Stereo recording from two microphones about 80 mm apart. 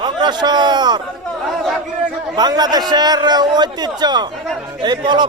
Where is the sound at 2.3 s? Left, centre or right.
Right.